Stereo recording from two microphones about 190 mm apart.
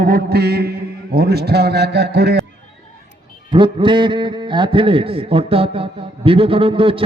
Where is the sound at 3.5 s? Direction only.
25° right (ahead or behind).